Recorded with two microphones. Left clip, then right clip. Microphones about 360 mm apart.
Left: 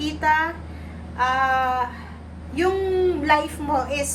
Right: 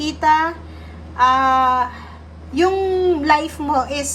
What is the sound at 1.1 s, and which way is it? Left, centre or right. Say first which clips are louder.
Speech: right 6 dB; centre.